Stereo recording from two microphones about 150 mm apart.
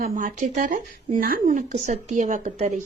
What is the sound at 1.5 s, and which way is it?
Speech, 55° right (ahead or behind).